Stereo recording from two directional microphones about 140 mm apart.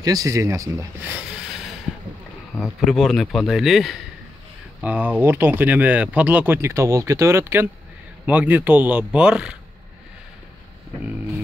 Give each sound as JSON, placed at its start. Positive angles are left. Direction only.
{"t": 0.0, "sound": "speech", "side_deg": -25}
{"t": 1.1, "sound": "a sound", "side_deg": -5}
{"t": 2.6, "sound": "speech", "side_deg": 0}
{"t": 4.8, "sound": "speech", "side_deg": -10}